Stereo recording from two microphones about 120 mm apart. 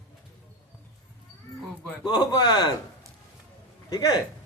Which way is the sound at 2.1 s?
35° left (ahead or behind).